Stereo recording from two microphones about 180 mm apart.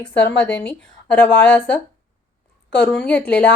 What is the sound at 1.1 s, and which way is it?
Speech, 10° left (ahead or behind).